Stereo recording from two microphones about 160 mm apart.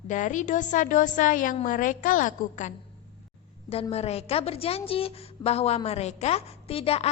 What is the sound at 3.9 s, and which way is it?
A woman's voice, 40° left (ahead or behind).